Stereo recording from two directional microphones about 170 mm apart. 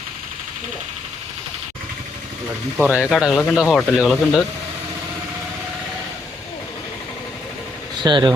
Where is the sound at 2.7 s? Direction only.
5° right (ahead or behind).